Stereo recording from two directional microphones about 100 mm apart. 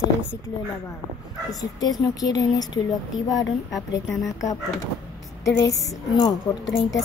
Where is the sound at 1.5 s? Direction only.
40° left (ahead or behind).